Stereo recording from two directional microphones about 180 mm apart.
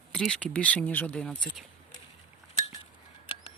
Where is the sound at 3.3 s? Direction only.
30° left (ahead or behind).